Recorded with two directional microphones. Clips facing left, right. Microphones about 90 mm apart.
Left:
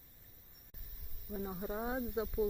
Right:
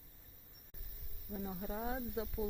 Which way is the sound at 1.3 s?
Centre (ahead or behind).